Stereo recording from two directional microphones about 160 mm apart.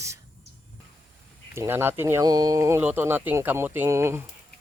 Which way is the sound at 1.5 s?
15° right (ahead or behind).